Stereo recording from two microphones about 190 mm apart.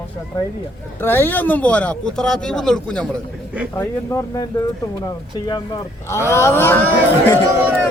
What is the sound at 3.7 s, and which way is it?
Speech, 15° left (ahead or behind).